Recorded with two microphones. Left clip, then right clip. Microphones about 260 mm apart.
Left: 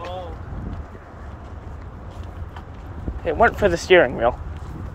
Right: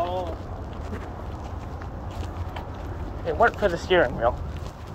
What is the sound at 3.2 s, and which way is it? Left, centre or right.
Speech, left.